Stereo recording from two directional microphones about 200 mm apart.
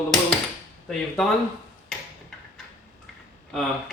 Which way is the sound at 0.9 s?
5° left (ahead or behind).